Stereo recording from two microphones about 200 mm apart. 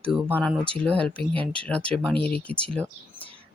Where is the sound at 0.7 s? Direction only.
5° left (ahead or behind).